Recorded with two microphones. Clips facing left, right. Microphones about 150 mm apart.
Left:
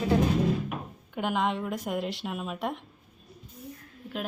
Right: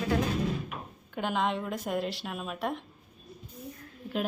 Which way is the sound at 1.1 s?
15° left (ahead or behind).